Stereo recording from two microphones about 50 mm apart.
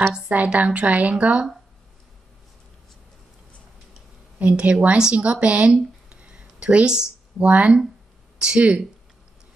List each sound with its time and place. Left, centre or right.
0.3 s a woman's voice: right
4.4 s a woman's voice: right